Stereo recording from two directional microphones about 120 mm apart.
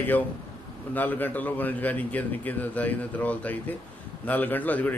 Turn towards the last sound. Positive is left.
turn(degrees=15)  # may be behind; listen again after turning